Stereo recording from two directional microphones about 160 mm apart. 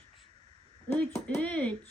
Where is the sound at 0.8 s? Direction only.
10° left (ahead or behind).